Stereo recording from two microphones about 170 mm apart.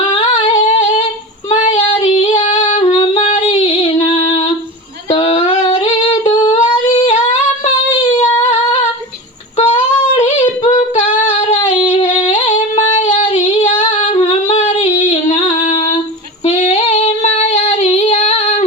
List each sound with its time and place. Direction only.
0.2 s singing: 40° left (ahead or behind)
1.5 s female singing: 35° left (ahead or behind)
5.1 s singing: 35° left (ahead or behind)
10.2 s singing: 35° left (ahead or behind)
10.8 s female singing: 45° left (ahead or behind)
12.5 s singing: 40° left (ahead or behind)
16.5 s female singing: 40° left (ahead or behind)